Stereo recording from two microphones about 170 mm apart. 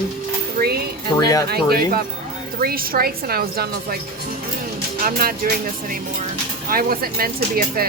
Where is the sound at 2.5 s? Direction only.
60° right (ahead or behind).